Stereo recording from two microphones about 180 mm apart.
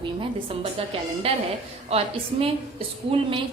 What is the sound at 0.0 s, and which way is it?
A woman's voice, 30° right (ahead or behind).